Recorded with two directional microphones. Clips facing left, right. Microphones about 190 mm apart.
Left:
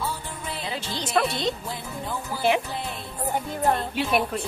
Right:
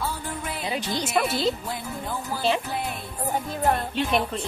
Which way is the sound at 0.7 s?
15° right (ahead or behind).